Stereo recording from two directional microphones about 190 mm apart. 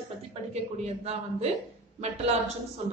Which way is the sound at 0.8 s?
35° right (ahead or behind).